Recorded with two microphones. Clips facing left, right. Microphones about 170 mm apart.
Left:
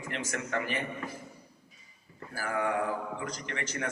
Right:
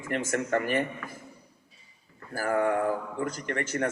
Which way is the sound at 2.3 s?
50° right (ahead or behind).